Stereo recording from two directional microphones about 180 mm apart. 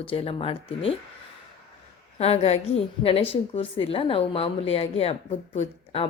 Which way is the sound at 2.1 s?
35° left (ahead or behind).